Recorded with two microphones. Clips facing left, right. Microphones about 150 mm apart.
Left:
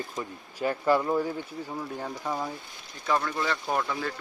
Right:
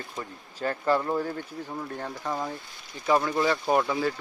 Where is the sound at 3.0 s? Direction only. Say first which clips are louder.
Right 4 dB; 20° right (ahead or behind).